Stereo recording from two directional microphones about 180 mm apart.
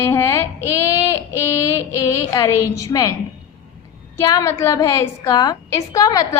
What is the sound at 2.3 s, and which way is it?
Speech, 20° left (ahead or behind).